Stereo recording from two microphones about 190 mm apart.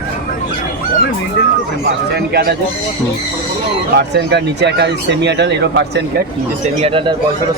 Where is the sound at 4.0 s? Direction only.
60° right (ahead or behind).